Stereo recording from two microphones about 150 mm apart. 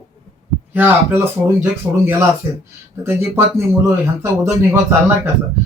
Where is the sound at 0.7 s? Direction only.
15° right (ahead or behind).